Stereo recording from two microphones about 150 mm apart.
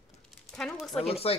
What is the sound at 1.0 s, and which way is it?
Speech, 40° left (ahead or behind).